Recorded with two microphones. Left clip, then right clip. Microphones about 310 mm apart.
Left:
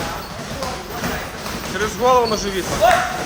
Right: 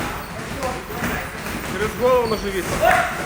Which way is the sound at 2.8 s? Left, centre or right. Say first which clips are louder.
Left 2 dB; left.